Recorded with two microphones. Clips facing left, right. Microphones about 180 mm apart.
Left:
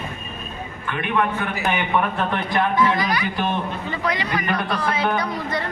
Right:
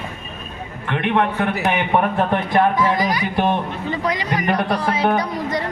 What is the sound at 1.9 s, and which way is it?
Speech, 45° right (ahead or behind).